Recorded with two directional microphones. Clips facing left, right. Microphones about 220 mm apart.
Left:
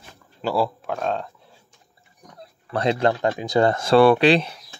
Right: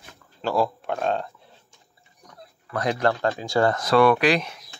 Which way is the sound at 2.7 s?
25° left (ahead or behind).